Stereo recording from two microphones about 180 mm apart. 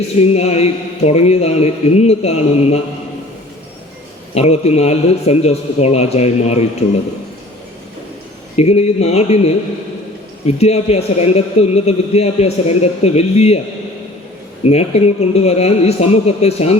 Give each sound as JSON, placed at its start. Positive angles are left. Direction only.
{"t": 0.2, "sound": "a man's voice", "side_deg": 35}
{"t": 4.4, "sound": "a man's voice", "side_deg": 35}
{"t": 8.5, "sound": "a man's voice", "side_deg": 35}
{"t": 14.6, "sound": "a man's voice", "side_deg": 35}